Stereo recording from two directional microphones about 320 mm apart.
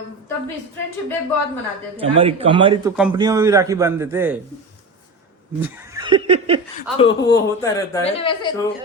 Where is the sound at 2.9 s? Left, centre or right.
Centre.